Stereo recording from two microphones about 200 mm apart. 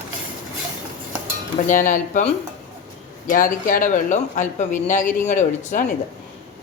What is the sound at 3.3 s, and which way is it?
Speech, 45° left (ahead or behind).